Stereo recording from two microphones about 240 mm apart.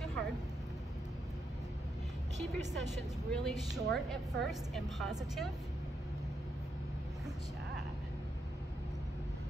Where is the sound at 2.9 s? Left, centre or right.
Centre.